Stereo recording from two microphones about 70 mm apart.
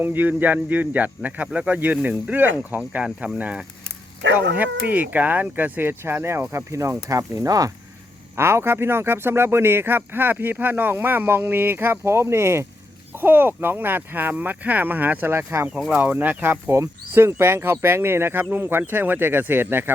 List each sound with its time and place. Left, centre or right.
0.0 s speech: right
8.4 s speech: right